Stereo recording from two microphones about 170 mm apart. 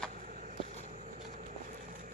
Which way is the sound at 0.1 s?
45° right (ahead or behind).